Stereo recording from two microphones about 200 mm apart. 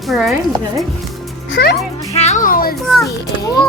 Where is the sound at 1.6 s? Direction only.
50° left (ahead or behind).